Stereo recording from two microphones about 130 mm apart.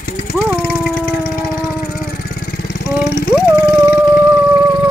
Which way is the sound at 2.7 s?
90° left.